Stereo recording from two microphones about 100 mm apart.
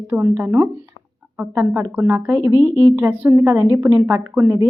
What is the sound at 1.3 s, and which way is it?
A woman's voice, 10° right (ahead or behind).